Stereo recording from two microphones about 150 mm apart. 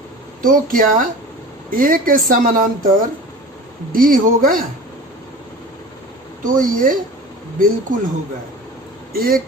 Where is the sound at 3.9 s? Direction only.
70° right (ahead or behind).